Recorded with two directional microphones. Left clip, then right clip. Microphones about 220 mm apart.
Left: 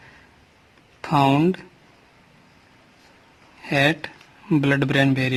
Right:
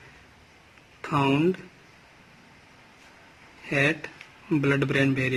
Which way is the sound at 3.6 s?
50° left (ahead or behind).